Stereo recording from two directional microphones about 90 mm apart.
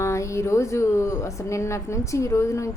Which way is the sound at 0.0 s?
30° left (ahead or behind).